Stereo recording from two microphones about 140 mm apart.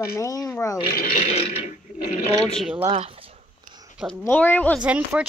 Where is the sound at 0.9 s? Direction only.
90° left.